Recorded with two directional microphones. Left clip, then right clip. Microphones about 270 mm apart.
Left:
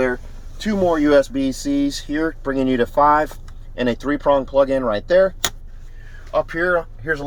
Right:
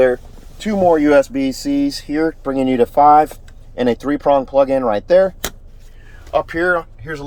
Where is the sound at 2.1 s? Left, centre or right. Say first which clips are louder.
Right 6 dB; right.